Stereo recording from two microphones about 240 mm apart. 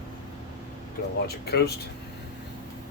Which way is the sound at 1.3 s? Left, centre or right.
Left.